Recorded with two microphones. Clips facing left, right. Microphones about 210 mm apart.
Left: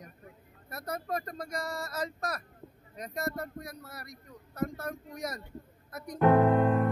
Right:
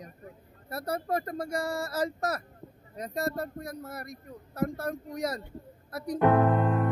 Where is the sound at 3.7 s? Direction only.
50° right (ahead or behind).